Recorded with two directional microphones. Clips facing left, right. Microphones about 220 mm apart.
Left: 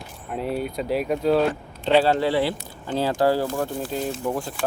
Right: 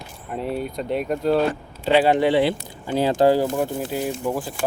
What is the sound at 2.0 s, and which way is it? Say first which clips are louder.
Speech: right 3 dB; 20° right (ahead or behind).